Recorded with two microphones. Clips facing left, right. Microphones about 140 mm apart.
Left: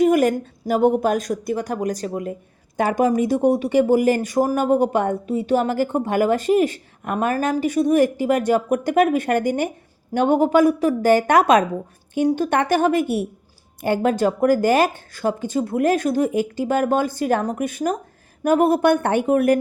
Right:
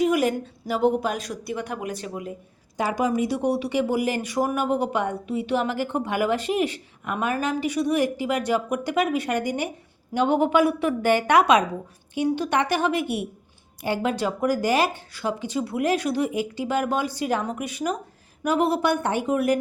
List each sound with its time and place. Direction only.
0.0 s a woman's voice: 50° left (ahead or behind)